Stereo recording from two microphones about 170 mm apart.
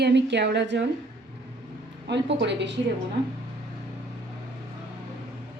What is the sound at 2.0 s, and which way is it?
Speech, 90° right.